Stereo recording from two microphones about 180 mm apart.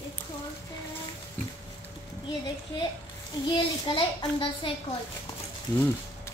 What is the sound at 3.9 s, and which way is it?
Speech, 25° left (ahead or behind).